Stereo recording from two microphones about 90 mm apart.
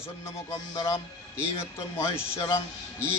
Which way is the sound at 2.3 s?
35° left (ahead or behind).